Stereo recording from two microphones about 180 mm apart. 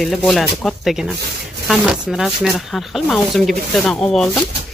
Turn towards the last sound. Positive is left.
turn(degrees=0)  # may be behind; listen again after turning